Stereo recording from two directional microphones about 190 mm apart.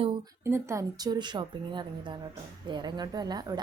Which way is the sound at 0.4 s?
15° right (ahead or behind).